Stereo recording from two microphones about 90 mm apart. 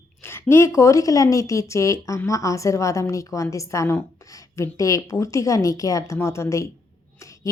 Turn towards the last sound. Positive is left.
turn(degrees=35)  # may be behind; listen again after turning